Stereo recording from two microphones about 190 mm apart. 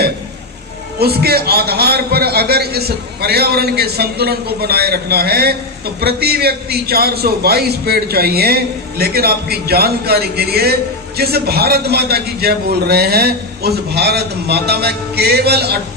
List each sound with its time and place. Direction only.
0.9 s a man's voice: 55° right (ahead or behind)